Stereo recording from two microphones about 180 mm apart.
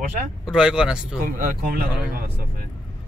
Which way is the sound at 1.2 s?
55° right (ahead or behind).